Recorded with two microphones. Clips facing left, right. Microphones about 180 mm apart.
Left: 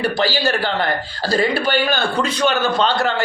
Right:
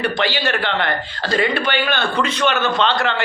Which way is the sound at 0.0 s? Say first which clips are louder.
Left 2 dB; 35° left (ahead or behind).